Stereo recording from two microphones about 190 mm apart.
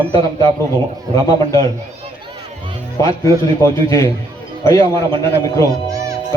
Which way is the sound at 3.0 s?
15° left (ahead or behind).